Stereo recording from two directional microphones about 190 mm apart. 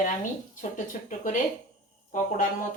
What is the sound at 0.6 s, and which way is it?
Speech, 40° left (ahead or behind).